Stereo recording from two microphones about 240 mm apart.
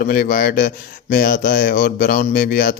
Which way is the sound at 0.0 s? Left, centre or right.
Left.